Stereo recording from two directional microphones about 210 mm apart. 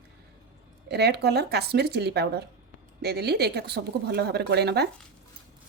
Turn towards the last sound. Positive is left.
turn(degrees=-50)  # may be behind; listen again after turning